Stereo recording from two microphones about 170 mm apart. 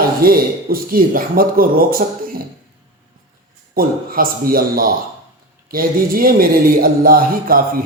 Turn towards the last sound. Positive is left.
turn(degrees=-60)  # may be behind; listen again after turning